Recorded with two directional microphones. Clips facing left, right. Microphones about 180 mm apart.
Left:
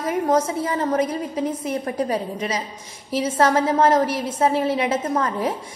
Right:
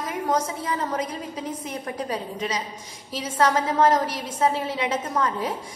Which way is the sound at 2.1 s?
30° left (ahead or behind).